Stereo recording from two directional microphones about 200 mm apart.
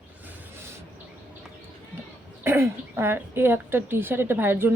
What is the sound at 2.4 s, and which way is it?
Speech, 10° right (ahead or behind).